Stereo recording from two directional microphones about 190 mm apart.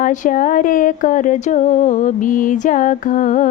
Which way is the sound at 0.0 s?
45° left (ahead or behind).